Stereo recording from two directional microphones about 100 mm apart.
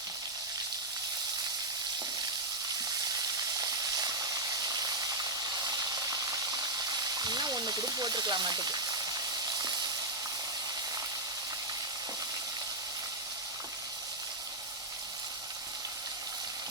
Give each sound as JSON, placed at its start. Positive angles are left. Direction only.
{"t": 3.6, "sound": "steam", "side_deg": -35}